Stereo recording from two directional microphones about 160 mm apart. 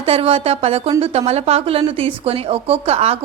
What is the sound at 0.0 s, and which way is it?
A woman's voice, 35° right (ahead or behind).